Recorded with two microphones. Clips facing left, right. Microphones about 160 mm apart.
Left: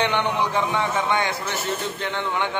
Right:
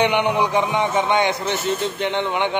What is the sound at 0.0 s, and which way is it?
A man's voice, 15° right (ahead or behind).